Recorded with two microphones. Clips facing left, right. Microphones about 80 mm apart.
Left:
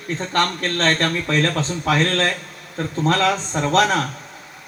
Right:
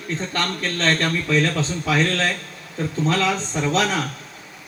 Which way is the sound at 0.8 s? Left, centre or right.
Left.